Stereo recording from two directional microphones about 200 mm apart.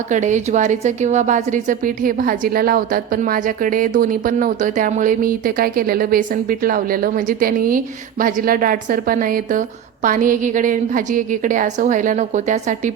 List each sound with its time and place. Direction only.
0.1 s a woman's voice: 40° right (ahead or behind)